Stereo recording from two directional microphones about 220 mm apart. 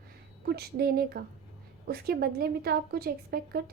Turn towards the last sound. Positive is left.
turn(degrees=-45)  # may be behind; listen again after turning